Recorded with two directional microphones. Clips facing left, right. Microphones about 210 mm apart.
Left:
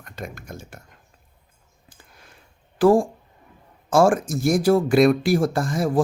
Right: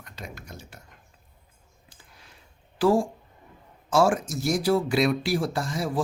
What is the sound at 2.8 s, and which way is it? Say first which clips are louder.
Speech: left 5 dB; 50° left (ahead or behind).